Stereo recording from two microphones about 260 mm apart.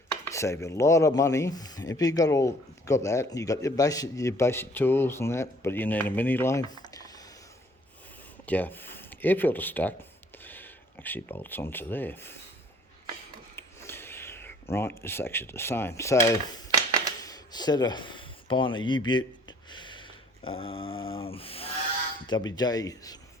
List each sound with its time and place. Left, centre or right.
0.1 s speech: centre
8.4 s speech: centre
13.6 s speech: centre
17.2 s a sound: centre
22.3 s speech: centre